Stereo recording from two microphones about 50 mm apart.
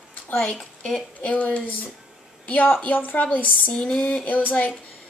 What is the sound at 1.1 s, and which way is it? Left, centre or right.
Speech, left.